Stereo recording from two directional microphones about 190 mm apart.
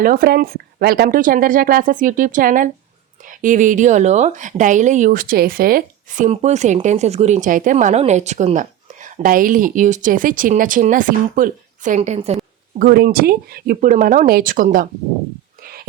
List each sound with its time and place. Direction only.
0.0 s speech: 50° right (ahead or behind)
12.8 s speech: 55° right (ahead or behind)
15.6 s a sound: 50° right (ahead or behind)